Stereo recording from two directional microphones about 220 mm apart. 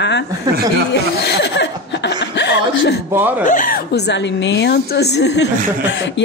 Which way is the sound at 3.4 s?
35° left (ahead or behind).